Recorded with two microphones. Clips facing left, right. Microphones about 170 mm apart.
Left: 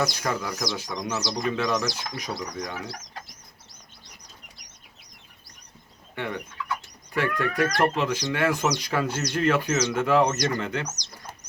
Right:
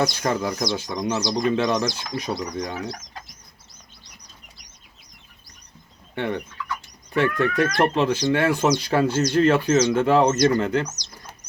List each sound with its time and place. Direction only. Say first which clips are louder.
0.4 s speech: right 5 dB; 25° right (ahead or behind)
6.1 s fowl: right 5 dB; 30° right (ahead or behind)
7.1 s speech: right 5 dB; 25° right (ahead or behind)